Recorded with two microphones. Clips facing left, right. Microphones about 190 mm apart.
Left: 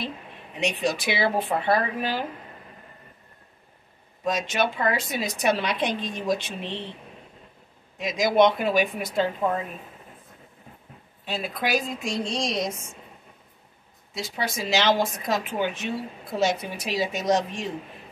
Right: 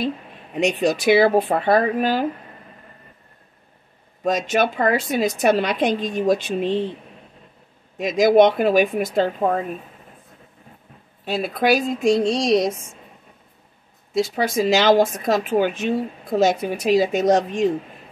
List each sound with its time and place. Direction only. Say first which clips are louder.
0.6 s speech: right 7 dB; 45° right (ahead or behind)
4.2 s speech: right 5 dB; 45° right (ahead or behind)
8.0 s speech: right 6 dB; 50° right (ahead or behind)
11.2 s speech: right 9 dB; 45° right (ahead or behind)
14.1 s speech: right 10 dB; 50° right (ahead or behind)